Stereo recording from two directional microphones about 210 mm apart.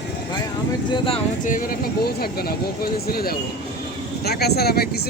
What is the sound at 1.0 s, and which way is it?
Speech, 35° left (ahead or behind).